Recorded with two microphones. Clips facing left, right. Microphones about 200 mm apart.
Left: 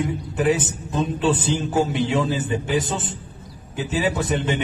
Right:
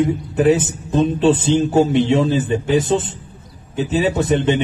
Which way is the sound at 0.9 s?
25° right (ahead or behind).